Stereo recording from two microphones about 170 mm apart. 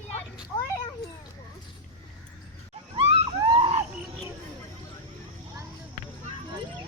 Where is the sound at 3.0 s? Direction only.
30° right (ahead or behind).